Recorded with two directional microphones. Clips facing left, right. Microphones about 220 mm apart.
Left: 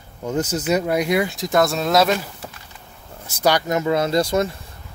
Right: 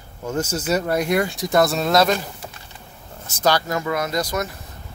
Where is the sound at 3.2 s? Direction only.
10° left (ahead or behind); by 4.5 s 25° left (ahead or behind).